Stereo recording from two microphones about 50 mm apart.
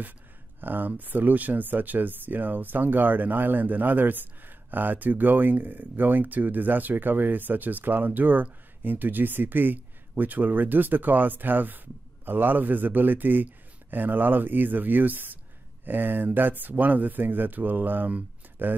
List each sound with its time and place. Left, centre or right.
0.6 s speech: right